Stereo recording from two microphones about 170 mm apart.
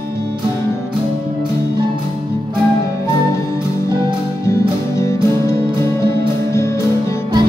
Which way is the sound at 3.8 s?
25° right (ahead or behind).